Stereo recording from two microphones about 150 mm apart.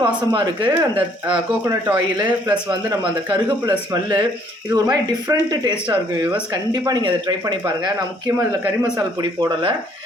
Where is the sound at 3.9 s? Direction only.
30° right (ahead or behind).